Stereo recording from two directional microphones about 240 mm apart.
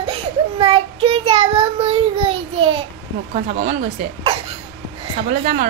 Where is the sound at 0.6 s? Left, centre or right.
Right.